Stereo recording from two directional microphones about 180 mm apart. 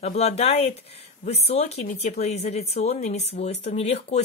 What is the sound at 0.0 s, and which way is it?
Speech, 35° left (ahead or behind).